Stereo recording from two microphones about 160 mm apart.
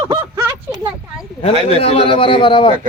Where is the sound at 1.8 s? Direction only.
35° left (ahead or behind).